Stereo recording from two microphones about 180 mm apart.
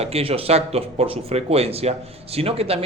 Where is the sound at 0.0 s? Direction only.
35° right (ahead or behind).